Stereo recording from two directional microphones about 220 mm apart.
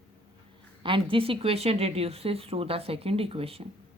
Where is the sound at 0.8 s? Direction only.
25° right (ahead or behind).